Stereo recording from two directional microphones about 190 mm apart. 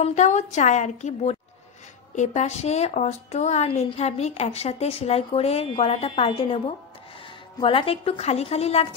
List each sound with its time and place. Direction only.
0.0 s a woman's voice: 40° left (ahead or behind)
7.6 s a woman's voice: 30° left (ahead or behind)